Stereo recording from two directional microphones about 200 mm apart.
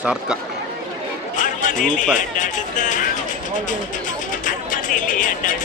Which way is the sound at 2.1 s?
40° left (ahead or behind).